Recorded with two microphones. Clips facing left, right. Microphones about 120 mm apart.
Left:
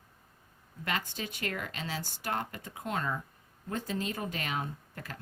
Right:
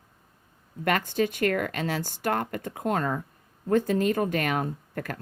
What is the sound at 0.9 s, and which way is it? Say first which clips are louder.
A woman's voice: right 11 dB; 55° right (ahead or behind).